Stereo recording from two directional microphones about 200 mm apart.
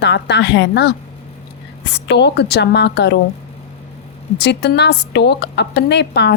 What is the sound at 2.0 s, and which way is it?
A woman's voice, 60° left (ahead or behind).